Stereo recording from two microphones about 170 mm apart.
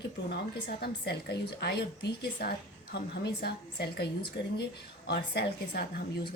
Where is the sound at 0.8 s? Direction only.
70° left (ahead or behind).